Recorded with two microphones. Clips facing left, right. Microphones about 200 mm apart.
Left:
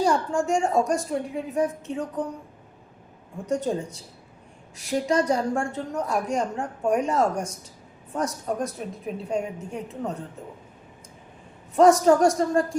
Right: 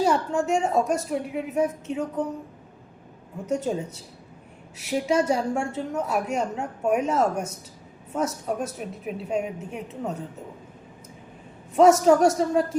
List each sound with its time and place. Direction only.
0.0 s a woman's voice: 5° right (ahead or behind)
3.4 s a woman's voice: 5° right (ahead or behind)
11.8 s a woman's voice: 5° right (ahead or behind)